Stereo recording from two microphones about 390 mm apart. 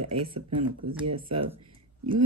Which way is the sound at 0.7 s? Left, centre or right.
Right.